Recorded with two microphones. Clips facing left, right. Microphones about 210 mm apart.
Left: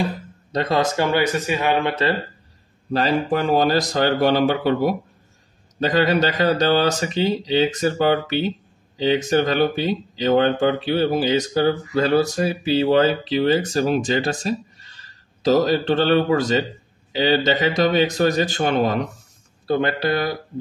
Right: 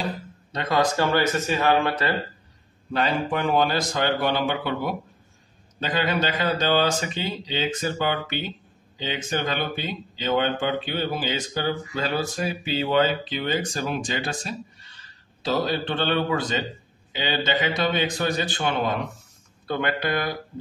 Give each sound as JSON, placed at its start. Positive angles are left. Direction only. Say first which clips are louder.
{"t": 0.5, "sound": "speech", "louder": "left 6 dB", "side_deg": 35}
{"t": 0.7, "sound": "speech", "louder": "left 1 dB", "side_deg": 15}
{"t": 2.9, "sound": "speech", "louder": "left 5 dB", "side_deg": 35}